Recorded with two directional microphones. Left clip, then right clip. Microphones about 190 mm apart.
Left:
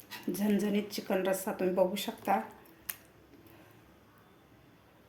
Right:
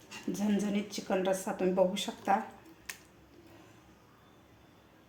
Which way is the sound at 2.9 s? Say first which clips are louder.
Right 2 dB; 25° left (ahead or behind).